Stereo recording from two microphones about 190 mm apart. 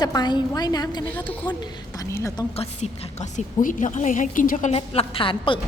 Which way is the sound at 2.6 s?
35° left (ahead or behind).